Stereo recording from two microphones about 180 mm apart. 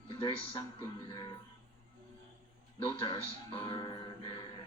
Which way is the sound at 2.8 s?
25° left (ahead or behind).